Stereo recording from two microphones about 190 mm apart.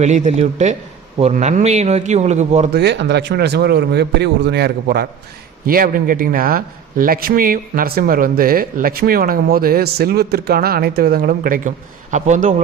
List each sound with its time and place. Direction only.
0.0 s a man's voice: 40° right (ahead or behind)
2.7 s a man's voice: 65° right (ahead or behind); by 12.5 s 40° right (ahead or behind)